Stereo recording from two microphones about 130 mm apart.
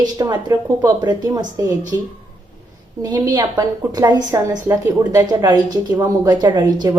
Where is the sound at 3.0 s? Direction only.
30° right (ahead or behind).